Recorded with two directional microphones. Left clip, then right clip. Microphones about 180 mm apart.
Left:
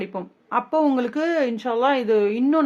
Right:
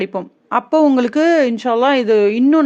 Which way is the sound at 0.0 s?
40° right (ahead or behind).